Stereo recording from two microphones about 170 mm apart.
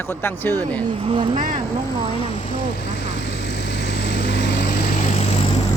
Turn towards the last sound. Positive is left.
turn(degrees=40)  # may be behind; listen again after turning